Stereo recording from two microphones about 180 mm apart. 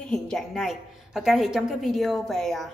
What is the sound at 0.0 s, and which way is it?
A woman's voice, 5° left (ahead or behind).